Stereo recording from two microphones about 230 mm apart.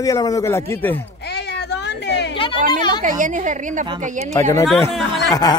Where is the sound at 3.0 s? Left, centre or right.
Right.